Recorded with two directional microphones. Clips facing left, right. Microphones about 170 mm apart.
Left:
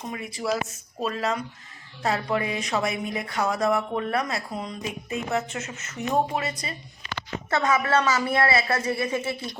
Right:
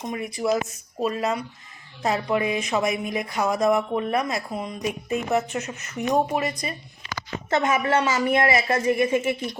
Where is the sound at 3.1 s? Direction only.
15° right (ahead or behind).